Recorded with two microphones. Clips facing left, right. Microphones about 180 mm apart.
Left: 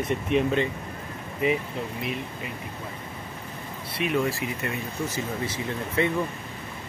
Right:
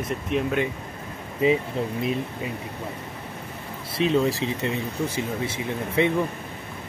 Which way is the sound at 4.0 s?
30° right (ahead or behind).